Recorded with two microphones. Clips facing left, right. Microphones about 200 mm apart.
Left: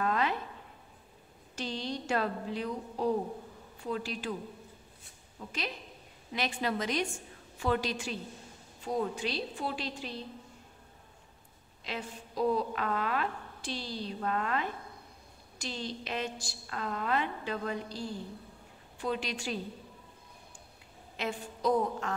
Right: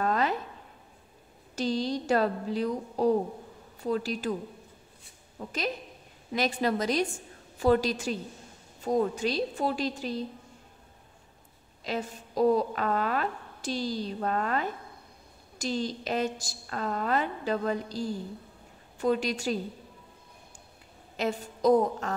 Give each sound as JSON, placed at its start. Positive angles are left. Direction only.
{"t": 0.0, "sound": "a sound", "side_deg": -40}
{"t": 1.5, "sound": "a woman's voice", "side_deg": -40}
{"t": 5.4, "sound": "a woman's voice", "side_deg": -50}
{"t": 11.8, "sound": "a woman's voice", "side_deg": -40}
{"t": 21.2, "sound": "a woman's voice", "side_deg": -40}